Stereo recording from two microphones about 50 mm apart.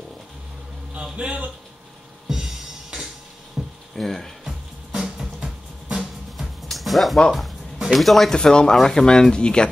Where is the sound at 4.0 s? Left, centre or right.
Centre.